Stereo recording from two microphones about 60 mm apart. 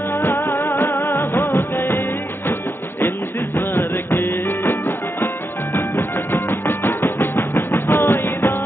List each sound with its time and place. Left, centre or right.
0.4 s music: left
0.7 s music: left
1.8 s music: left
3.0 s a sound: left
4.5 s music: left